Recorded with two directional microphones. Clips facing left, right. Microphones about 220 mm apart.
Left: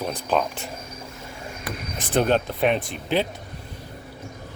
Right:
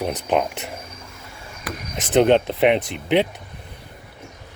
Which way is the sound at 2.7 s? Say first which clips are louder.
Right 4 dB; 70° right (ahead or behind).